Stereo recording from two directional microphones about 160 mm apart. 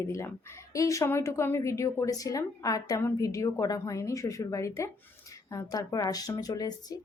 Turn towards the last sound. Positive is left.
turn(degrees=20)  # may be behind; listen again after turning